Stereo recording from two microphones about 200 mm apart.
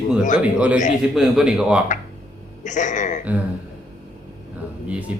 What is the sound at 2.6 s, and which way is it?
Speech, 40° left (ahead or behind).